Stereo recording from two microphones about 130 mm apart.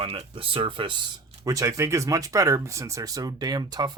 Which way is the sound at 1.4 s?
25° right (ahead or behind).